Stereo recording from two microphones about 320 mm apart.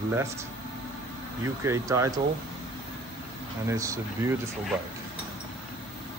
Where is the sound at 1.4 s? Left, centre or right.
Centre.